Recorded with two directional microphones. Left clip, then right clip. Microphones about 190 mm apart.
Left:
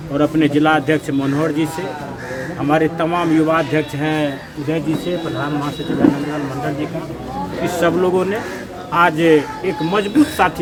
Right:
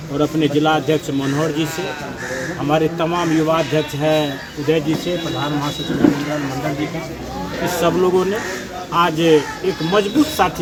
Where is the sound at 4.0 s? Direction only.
25° right (ahead or behind).